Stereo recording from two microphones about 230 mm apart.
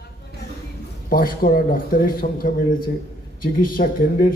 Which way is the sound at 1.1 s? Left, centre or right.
Left.